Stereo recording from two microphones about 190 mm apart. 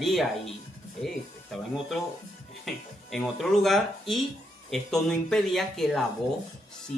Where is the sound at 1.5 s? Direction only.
Centre (ahead or behind).